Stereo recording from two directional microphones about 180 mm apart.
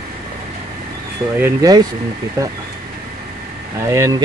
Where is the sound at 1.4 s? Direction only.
20° right (ahead or behind).